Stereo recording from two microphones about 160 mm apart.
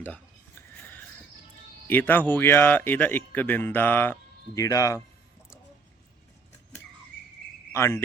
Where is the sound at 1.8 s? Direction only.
10° left (ahead or behind).